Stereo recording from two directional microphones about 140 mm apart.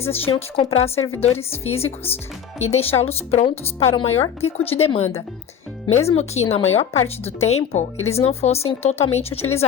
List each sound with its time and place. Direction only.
0.0 s speech: 45° left (ahead or behind)